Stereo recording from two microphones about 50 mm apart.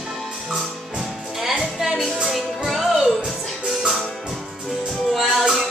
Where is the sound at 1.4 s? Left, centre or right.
Centre.